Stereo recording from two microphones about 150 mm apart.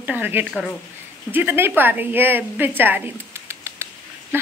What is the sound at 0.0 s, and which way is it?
Speech, 10° right (ahead or behind).